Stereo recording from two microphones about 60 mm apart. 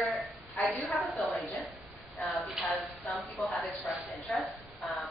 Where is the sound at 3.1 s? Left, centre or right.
Left.